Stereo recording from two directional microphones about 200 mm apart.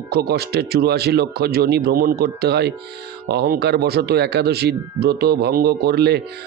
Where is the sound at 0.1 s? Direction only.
55° right (ahead or behind).